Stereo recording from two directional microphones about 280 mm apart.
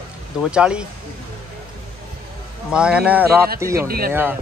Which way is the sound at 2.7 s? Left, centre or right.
Centre.